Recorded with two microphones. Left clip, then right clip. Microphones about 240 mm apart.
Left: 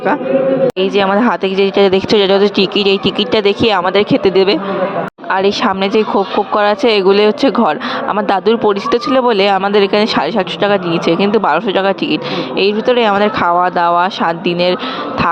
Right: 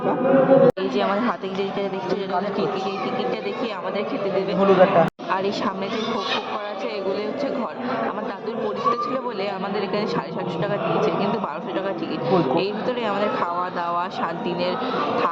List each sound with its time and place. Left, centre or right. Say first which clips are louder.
0.8 s speech: left 10 dB; left